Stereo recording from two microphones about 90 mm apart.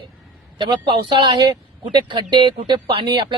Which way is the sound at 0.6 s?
55° right (ahead or behind).